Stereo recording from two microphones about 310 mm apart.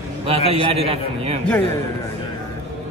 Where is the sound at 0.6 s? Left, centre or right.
Centre.